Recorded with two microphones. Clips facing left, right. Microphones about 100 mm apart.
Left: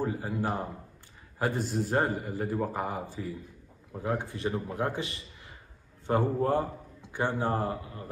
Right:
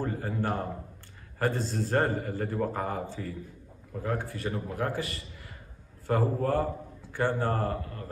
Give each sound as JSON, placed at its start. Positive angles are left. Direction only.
{"t": 0.0, "sound": "a man's voice", "side_deg": 10}